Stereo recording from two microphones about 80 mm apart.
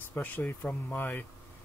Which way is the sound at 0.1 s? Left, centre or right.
Left.